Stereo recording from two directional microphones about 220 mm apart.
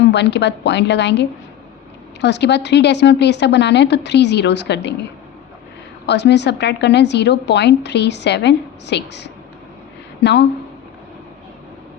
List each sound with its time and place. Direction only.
0.1 s a woman's voice: 50° left (ahead or behind)
6.1 s a woman's voice: 50° left (ahead or behind)